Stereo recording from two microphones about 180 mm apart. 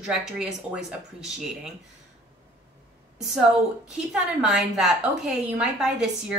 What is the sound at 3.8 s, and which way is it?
A woman's voice, 5° right (ahead or behind).